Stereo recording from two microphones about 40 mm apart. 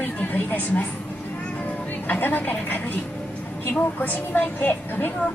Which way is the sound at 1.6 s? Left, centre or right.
Left.